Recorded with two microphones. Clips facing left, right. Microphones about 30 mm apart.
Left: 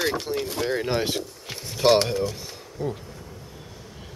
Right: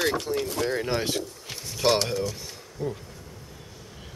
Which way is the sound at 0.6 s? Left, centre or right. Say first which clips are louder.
Left 4 dB; centre.